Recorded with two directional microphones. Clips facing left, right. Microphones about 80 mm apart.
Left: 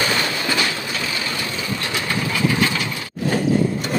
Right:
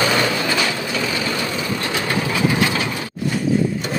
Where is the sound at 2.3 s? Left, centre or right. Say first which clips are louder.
Even; centre.